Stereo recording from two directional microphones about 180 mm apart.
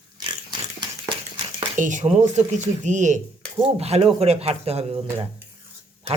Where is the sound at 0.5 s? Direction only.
25° right (ahead or behind).